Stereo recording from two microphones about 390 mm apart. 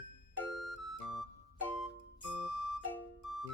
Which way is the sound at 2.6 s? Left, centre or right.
Left.